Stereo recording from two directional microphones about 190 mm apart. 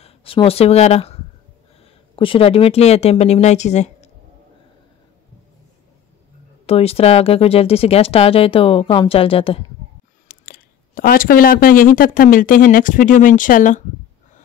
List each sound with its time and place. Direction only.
0.0 s speech: 30° left (ahead or behind)
6.6 s speech: 30° left (ahead or behind)
10.2 s speech: 50° left (ahead or behind)